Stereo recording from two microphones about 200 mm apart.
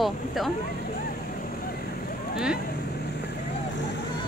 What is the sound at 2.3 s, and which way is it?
Vehicle, 5° right (ahead or behind).